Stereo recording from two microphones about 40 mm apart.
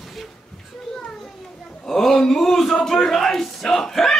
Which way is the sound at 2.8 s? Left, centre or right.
Centre.